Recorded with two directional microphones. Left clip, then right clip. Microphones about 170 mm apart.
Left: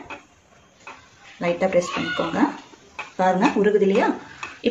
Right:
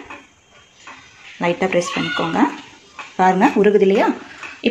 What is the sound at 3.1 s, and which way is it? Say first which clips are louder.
Speech: right 5 dB; 30° right (ahead or behind).